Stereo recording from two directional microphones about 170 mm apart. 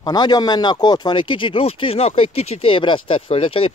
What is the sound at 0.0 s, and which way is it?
Speech, 25° left (ahead or behind).